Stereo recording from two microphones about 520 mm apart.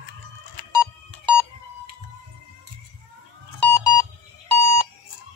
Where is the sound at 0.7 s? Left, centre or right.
Right.